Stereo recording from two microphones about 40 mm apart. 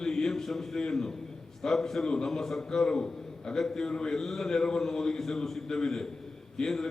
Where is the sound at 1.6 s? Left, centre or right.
Centre.